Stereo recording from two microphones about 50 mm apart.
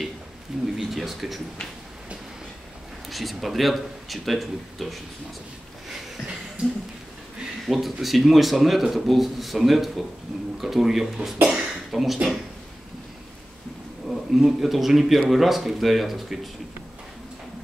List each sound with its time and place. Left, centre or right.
0.7 s speech: centre
3.1 s speech: centre
6.6 s speech: right
7.6 s speech: centre
14.0 s speech: centre